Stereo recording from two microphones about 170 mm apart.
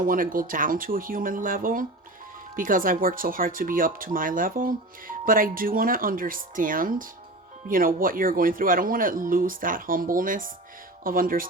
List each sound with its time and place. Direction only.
0.0 s speech: 55° right (ahead or behind)